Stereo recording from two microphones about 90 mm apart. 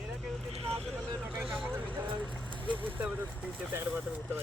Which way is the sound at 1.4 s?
5° right (ahead or behind).